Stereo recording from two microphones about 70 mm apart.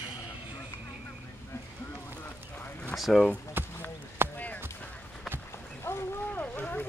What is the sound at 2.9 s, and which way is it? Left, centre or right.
Speech, centre.